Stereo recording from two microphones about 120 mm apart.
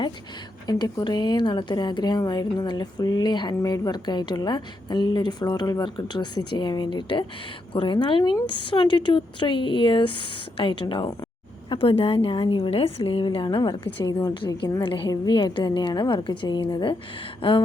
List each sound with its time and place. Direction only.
0.7 s speech: 35° left (ahead or behind)